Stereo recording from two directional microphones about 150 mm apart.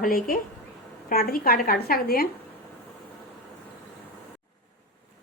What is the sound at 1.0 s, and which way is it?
A woman's voice, 80° left.